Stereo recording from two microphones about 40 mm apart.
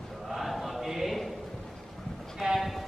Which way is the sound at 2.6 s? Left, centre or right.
Centre.